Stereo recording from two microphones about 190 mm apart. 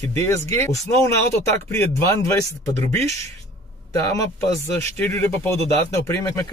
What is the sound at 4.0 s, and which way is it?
Speech, 15° left (ahead or behind).